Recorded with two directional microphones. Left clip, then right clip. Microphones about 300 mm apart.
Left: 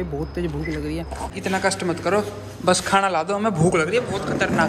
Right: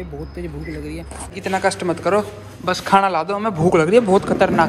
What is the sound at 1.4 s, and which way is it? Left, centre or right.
A man's voice, centre.